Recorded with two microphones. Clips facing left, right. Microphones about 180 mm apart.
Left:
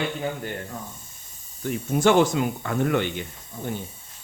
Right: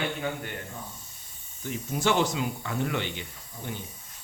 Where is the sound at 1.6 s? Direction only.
55° left (ahead or behind).